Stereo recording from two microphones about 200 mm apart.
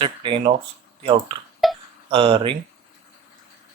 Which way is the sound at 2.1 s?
30° right (ahead or behind).